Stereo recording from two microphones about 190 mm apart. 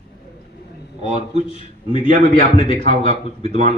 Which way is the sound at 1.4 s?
30° left (ahead or behind).